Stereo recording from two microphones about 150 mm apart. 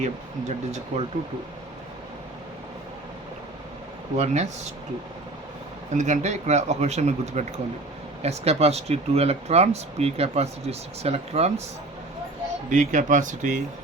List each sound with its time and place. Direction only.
0.0 s speech: 50° right (ahead or behind)
4.2 s speech: 50° right (ahead or behind)
5.9 s speech: 55° right (ahead or behind)
12.7 s speech: 55° right (ahead or behind)